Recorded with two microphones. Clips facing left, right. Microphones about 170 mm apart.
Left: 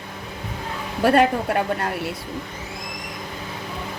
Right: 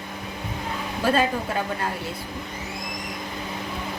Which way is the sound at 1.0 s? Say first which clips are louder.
Left 5 dB; 65° left (ahead or behind).